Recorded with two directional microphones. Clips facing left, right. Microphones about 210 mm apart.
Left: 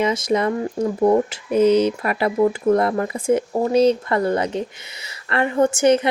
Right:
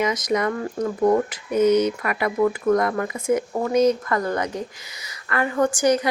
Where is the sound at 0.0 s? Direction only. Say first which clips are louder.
Left 3 dB; 30° left (ahead or behind).